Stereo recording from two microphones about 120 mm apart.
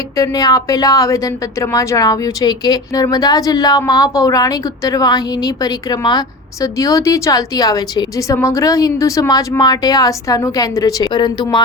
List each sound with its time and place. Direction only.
0.2 s a woman's voice: 30° left (ahead or behind)